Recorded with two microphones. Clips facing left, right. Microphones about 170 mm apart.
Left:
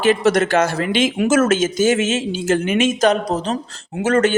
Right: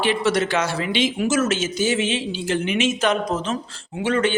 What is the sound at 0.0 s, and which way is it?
A man's voice, 45° left (ahead or behind).